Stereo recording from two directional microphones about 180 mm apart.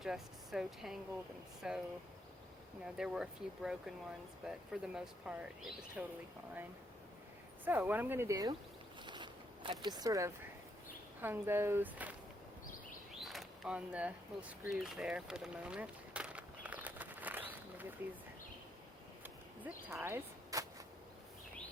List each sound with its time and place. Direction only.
0.0 s speech: 5° right (ahead or behind)
2.8 s speech: 5° right (ahead or behind)
7.6 s speech: 10° right (ahead or behind)
9.0 s zipper: 25° right (ahead or behind)
11.2 s speech: 10° right (ahead or behind)
13.2 s a sound: centre (ahead or behind)
19.2 s arrow: 10° right (ahead or behind)